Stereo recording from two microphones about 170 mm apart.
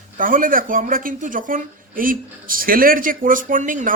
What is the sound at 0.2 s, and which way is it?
Speech, 55° right (ahead or behind).